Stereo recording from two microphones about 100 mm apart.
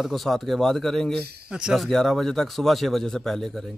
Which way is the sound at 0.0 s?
Centre (ahead or behind).